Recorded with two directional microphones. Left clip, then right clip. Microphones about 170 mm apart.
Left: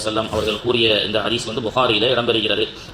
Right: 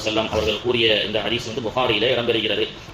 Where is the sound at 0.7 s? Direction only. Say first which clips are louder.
Left 3 dB; 30° left (ahead or behind).